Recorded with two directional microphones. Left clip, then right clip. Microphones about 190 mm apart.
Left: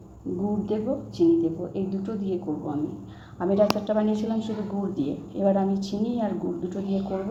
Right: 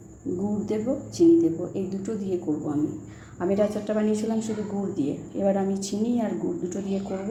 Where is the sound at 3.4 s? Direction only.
20° right (ahead or behind).